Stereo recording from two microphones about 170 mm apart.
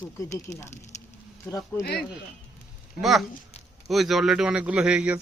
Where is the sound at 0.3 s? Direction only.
15° left (ahead or behind).